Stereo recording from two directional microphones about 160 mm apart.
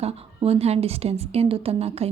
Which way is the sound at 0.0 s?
40° right (ahead or behind).